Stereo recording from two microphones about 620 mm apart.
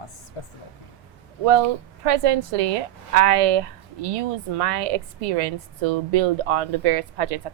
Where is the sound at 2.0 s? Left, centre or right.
Right.